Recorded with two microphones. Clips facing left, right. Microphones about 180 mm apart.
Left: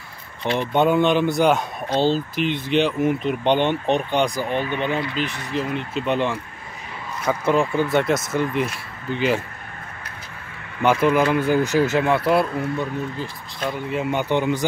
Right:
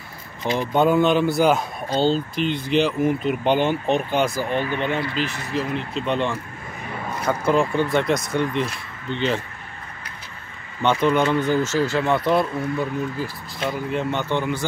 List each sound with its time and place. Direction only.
0.6 s speech: centre (ahead or behind)
10.8 s speech: 5° left (ahead or behind)
12.1 s speech: 5° left (ahead or behind)
14.3 s speech: 15° left (ahead or behind)